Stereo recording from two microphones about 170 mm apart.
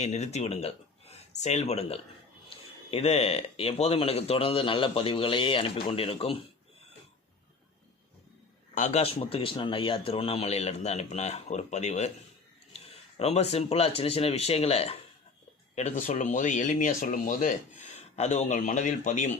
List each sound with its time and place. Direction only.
0.0 s speech: 40° left (ahead or behind)
8.7 s speech: 45° left (ahead or behind)